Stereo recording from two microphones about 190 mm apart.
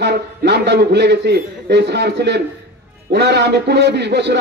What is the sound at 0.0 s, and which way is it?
A man's voice, 60° right (ahead or behind).